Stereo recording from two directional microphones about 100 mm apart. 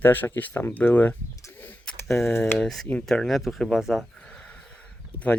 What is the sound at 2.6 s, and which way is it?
Speech, 5° left (ahead or behind).